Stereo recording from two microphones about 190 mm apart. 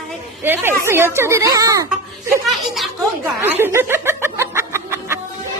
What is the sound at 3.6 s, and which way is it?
Music, 10° right (ahead or behind).